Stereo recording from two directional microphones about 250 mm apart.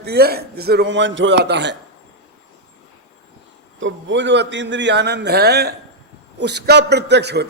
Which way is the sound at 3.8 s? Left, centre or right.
Right.